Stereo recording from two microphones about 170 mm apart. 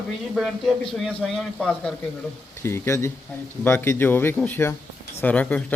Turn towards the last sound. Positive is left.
turn(degrees=10)  # may be behind; listen again after turning